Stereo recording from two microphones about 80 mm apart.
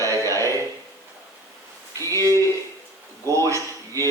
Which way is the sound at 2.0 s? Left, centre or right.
Right.